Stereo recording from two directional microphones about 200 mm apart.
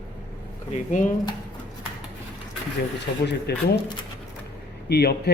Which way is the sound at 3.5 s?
55° left (ahead or behind).